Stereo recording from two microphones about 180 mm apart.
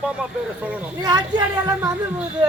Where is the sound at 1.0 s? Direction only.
20° right (ahead or behind).